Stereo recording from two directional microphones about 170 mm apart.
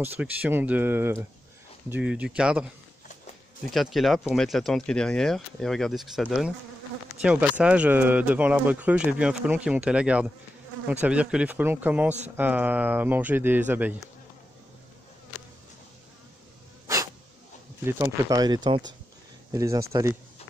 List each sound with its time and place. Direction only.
0.0 s speech: 10° right (ahead or behind)
3.7 s speech: centre (ahead or behind)
16.8 s a sound: 20° right (ahead or behind)
17.8 s speech: 15° right (ahead or behind)